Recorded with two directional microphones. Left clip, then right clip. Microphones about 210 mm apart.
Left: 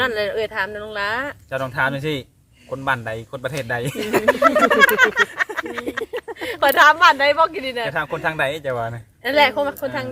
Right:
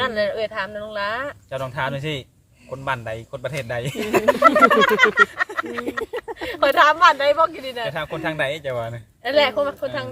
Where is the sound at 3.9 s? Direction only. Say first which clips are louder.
Right 1 dB; centre (ahead or behind).